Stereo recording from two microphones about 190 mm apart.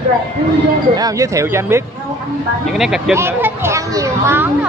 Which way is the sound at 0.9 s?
20° right (ahead or behind).